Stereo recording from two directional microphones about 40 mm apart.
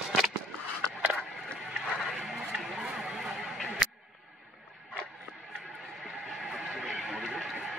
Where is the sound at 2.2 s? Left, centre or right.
Centre.